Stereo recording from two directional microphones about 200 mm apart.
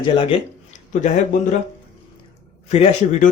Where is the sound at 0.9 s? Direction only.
40° left (ahead or behind).